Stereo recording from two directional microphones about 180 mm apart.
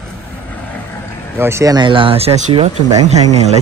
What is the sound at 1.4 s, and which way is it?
Speech, 15° right (ahead or behind).